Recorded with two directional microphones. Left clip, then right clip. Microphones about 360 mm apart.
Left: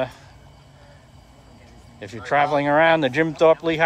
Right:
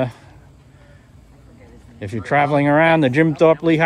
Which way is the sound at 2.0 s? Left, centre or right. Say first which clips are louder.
Right 2 dB; centre.